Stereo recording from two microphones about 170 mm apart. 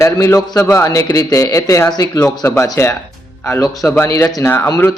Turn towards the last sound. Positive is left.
turn(degrees=15)  # may be behind; listen again after turning